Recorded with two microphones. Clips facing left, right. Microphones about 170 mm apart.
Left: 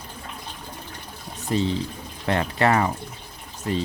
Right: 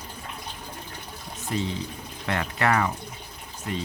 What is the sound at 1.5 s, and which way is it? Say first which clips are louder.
Speech: left 5 dB; 30° left (ahead or behind).